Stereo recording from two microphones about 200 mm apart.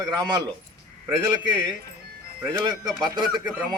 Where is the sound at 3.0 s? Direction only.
20° right (ahead or behind).